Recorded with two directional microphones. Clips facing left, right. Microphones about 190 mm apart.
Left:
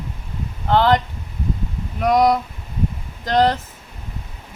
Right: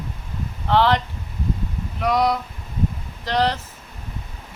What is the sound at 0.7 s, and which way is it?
Speech, 45° left (ahead or behind).